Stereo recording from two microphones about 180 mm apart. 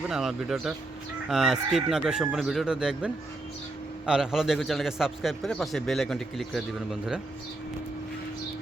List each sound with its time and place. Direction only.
0.1 s a man's voice: centre (ahead or behind)